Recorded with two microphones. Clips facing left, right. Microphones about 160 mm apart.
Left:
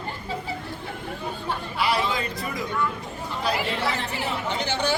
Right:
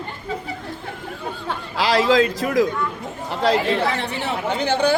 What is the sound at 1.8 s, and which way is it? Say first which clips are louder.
Speech: right 9 dB; 90° right.